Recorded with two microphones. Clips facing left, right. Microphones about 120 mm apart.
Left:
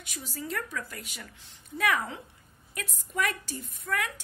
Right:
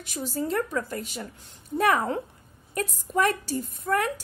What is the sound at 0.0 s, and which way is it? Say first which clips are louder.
A woman's voice: right 9 dB; 35° right (ahead or behind).